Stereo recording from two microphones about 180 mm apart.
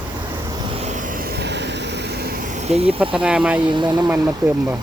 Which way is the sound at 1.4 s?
75° right (ahead or behind).